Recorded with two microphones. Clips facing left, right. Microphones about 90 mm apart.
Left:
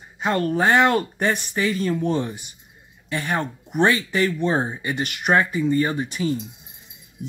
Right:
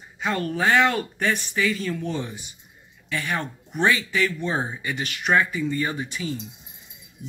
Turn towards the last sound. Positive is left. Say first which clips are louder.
# left 6 dB
turn(degrees=40)  # may be behind; listen again after turning